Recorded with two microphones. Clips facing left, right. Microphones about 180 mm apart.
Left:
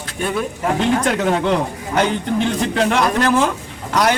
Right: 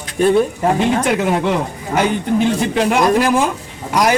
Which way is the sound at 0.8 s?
10° right (ahead or behind).